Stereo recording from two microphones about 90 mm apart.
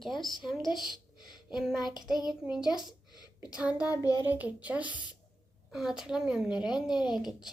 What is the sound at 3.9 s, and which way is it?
Child singing, 40° left (ahead or behind).